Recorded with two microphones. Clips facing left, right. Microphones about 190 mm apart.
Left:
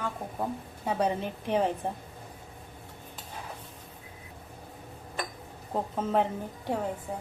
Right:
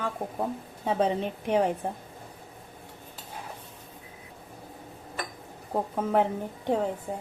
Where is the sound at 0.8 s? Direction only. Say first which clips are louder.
Right 3 dB; 20° right (ahead or behind).